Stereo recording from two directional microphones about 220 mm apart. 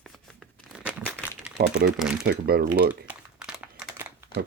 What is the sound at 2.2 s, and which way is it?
Speech, 45° right (ahead or behind).